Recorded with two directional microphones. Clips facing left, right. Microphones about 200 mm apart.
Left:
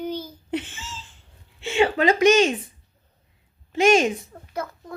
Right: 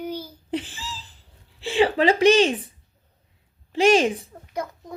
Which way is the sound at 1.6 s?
35° right (ahead or behind).